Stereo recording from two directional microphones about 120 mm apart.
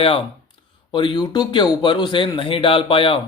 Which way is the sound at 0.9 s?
40° left (ahead or behind).